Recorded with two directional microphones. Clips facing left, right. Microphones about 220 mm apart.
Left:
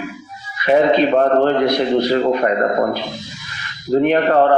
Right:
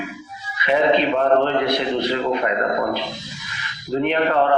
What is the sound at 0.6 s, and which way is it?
A man's voice, 40° left (ahead or behind).